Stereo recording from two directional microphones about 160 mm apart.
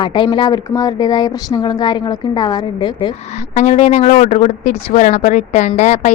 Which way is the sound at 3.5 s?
45° left (ahead or behind).